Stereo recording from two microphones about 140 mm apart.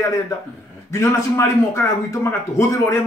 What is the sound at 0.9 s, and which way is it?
A man's voice, 20° left (ahead or behind).